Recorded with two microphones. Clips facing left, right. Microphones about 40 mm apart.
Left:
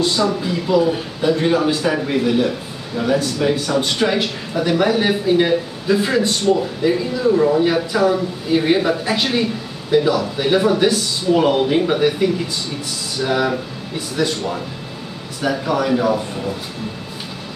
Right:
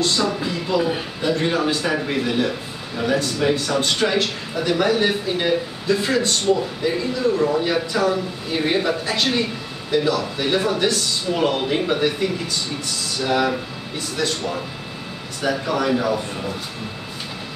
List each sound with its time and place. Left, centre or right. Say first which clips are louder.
0.0 s a man's voice: left 3 dB; centre